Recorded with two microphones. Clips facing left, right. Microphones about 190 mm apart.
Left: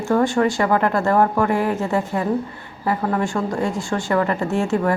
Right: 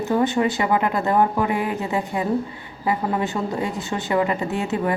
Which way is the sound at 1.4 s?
50° left (ahead or behind).